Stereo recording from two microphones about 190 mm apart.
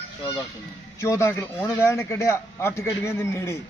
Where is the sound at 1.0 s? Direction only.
15° left (ahead or behind).